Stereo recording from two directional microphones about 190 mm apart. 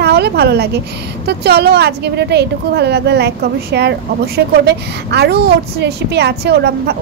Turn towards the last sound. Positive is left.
turn(degrees=-60)  # may be behind; listen again after turning